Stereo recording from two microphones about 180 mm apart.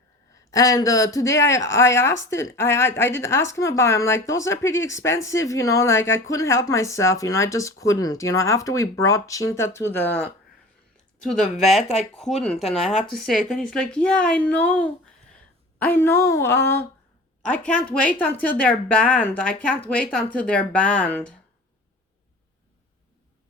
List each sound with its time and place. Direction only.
0.5 s speech: 20° left (ahead or behind)